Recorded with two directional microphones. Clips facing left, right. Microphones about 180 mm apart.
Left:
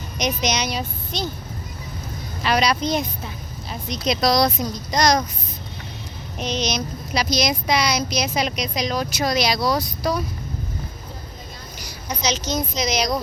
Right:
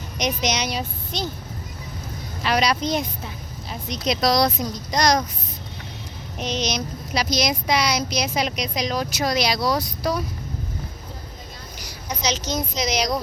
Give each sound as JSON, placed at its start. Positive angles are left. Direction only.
{"t": 0.2, "sound": "a woman's voice", "side_deg": -20}
{"t": 2.4, "sound": "a child's voice", "side_deg": -10}
{"t": 4.0, "sound": "speech", "side_deg": 0}
{"t": 6.4, "sound": "a child's voice", "side_deg": -15}
{"t": 9.2, "sound": "speech", "side_deg": -5}
{"t": 12.2, "sound": "a child's voice", "side_deg": -10}